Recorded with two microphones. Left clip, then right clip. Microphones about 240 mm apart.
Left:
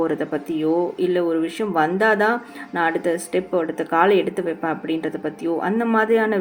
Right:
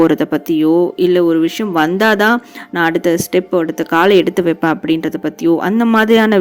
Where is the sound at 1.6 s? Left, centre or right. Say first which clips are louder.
Right 4 dB; right.